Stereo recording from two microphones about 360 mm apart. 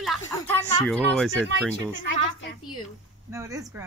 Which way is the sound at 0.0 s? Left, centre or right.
Centre.